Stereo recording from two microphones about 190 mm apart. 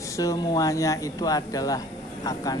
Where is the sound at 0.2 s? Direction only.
20° left (ahead or behind).